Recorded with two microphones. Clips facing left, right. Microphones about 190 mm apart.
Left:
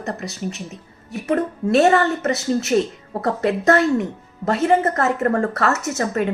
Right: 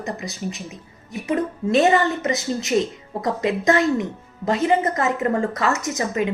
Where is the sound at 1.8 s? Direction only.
15° right (ahead or behind).